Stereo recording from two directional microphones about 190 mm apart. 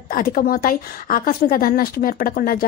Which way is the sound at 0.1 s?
50° left (ahead or behind).